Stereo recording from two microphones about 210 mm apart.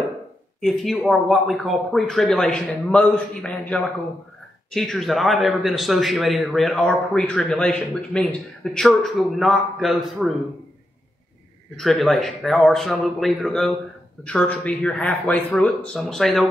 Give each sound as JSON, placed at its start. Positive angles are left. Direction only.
{"t": 0.6, "sound": "a man's voice", "side_deg": 0}
{"t": 11.7, "sound": "a man's voice", "side_deg": 0}